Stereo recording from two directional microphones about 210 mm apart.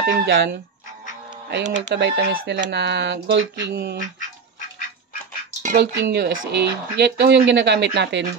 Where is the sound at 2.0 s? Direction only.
55° right (ahead or behind).